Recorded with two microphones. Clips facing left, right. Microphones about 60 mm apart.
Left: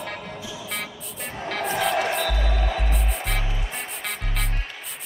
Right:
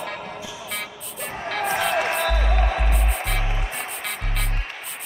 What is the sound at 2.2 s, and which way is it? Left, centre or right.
Music, right.